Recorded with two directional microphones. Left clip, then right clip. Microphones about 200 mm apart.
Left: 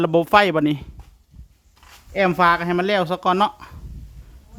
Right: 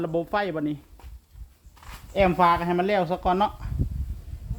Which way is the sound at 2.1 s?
35° left (ahead or behind).